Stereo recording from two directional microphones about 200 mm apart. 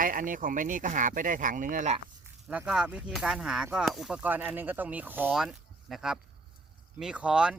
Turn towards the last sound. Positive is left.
turn(degrees=-5)  # may be behind; listen again after turning